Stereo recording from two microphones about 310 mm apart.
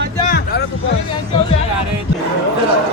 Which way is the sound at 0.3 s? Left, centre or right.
Left.